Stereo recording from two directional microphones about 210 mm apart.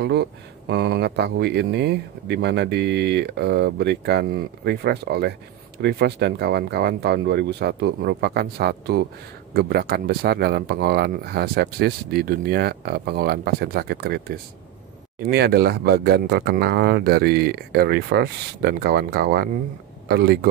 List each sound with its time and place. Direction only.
0.0 s speech: 50° right (ahead or behind)